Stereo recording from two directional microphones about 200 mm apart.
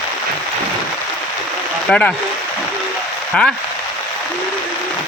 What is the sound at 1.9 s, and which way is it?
Speech, 5° left (ahead or behind).